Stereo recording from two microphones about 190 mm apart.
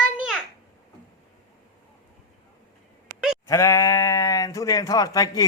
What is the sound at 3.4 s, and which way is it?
Speech, 15° left (ahead or behind).